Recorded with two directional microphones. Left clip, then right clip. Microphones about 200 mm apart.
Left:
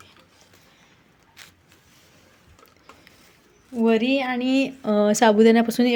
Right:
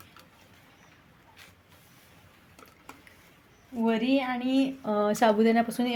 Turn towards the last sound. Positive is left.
turn(degrees=35)  # may be behind; listen again after turning